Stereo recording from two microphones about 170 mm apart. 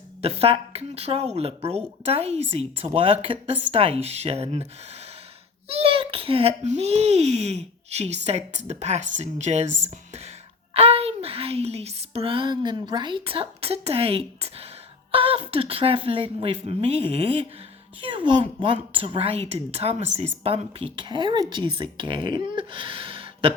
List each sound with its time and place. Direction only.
0.2 s a child's voice: 35° right (ahead or behind)
5.6 s a child's voice: 35° right (ahead or behind)